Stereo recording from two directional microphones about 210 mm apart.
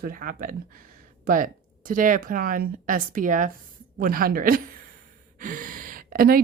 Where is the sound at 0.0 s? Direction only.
40° right (ahead or behind).